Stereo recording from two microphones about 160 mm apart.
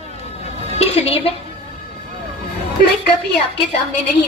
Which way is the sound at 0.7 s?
40° left (ahead or behind).